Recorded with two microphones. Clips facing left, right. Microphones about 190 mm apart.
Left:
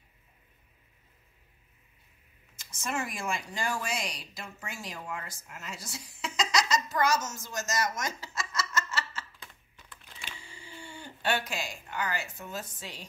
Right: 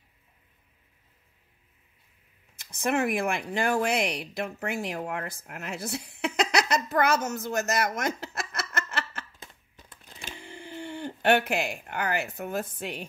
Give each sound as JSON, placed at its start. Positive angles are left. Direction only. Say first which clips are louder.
{"t": 2.5, "sound": "speech", "louder": "right 8 dB", "side_deg": -60}
{"t": 9.8, "sound": "a sound", "louder": "right 3 dB", "side_deg": -40}
{"t": 10.3, "sound": "speech", "louder": "right 8 dB", "side_deg": -60}